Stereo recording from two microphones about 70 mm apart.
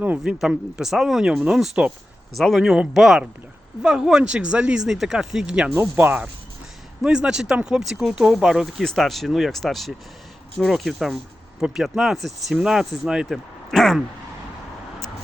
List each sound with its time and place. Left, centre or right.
0.2 s speech: centre
2.3 s speech: centre
6.0 s speech: right
7.0 s speech: centre
13.2 s speech: centre